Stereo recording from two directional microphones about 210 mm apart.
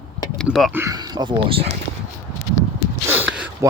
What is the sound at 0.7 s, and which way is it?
Speech, 15° right (ahead or behind).